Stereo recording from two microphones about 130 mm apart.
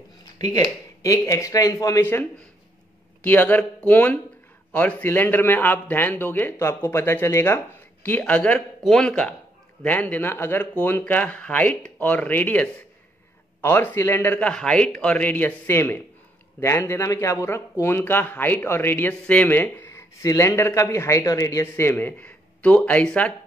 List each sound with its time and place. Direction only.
0.2 s speech: 30° left (ahead or behind)
3.3 s a man's voice: 15° left (ahead or behind)